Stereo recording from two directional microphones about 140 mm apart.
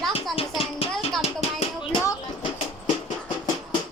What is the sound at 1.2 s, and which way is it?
Music, 45° left (ahead or behind).